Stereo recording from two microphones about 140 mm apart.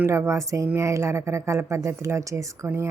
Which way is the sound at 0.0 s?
20° right (ahead or behind).